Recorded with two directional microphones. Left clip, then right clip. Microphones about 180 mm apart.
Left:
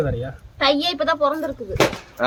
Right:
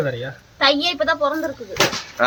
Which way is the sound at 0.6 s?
20° left (ahead or behind).